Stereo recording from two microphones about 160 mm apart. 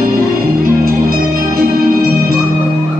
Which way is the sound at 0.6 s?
65° right (ahead or behind).